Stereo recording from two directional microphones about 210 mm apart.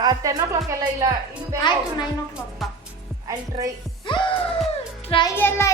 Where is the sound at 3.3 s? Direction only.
15° right (ahead or behind).